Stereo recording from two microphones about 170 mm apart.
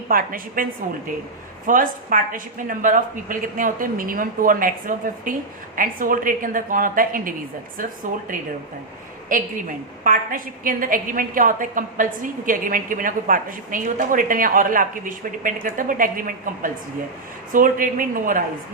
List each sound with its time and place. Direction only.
0.1 s a woman's voice: 55° right (ahead or behind)
9.3 s a woman's voice: 50° right (ahead or behind)